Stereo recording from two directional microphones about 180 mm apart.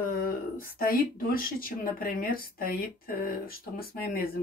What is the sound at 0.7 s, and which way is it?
Speech, 55° left (ahead or behind).